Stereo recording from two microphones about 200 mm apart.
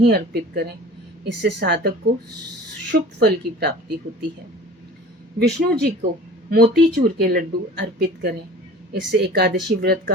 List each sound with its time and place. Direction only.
0.0 s speech: 55° right (ahead or behind)
2.9 s speech: 55° right (ahead or behind)
5.4 s speech: 55° right (ahead or behind)